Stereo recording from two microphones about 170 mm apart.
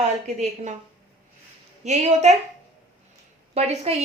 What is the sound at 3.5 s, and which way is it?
Speech, 35° right (ahead or behind).